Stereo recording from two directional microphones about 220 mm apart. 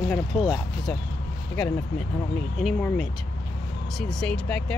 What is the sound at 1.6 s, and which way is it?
Speech, 10° left (ahead or behind).